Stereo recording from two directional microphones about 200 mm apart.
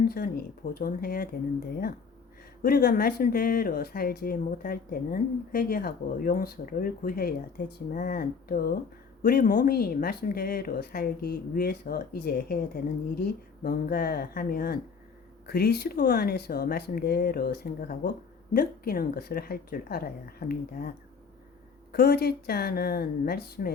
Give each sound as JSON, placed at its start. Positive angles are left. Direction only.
{"t": 0.0, "sound": "a woman's voice", "side_deg": 50}
{"t": 2.6, "sound": "a woman's voice", "side_deg": 50}
{"t": 21.9, "sound": "a woman's voice", "side_deg": 50}